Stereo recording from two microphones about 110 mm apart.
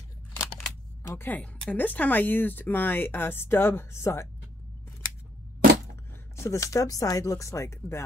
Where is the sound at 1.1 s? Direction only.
15° left (ahead or behind).